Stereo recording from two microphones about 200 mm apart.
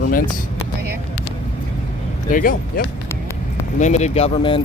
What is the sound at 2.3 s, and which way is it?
Speech, 45° left (ahead or behind).